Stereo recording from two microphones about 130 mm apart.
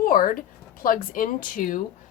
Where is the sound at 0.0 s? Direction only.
90° left.